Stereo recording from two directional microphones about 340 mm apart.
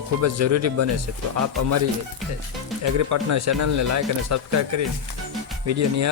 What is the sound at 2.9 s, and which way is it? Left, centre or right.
Speech, right.